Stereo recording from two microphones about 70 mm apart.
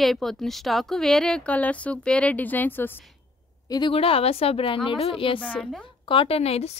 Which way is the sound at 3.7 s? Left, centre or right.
Left.